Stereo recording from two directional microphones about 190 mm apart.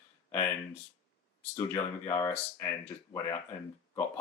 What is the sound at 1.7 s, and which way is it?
Speech, 15° left (ahead or behind).